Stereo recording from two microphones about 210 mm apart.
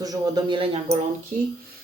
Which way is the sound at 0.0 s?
20° right (ahead or behind).